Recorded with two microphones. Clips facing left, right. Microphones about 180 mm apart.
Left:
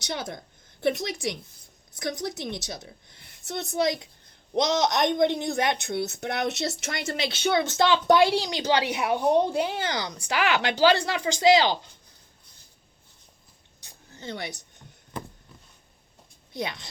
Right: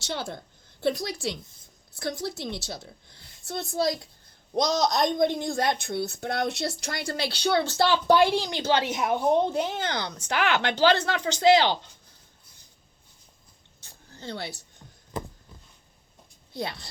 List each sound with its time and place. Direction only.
0.0 s a woman's voice: 20° left (ahead or behind)
13.8 s a sound: 15° left (ahead or behind)
16.5 s speech: 20° left (ahead or behind)